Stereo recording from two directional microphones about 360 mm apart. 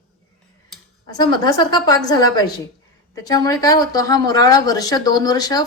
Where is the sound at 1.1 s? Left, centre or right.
Centre.